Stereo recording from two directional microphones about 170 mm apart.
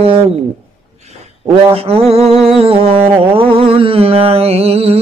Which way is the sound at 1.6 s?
35° right (ahead or behind).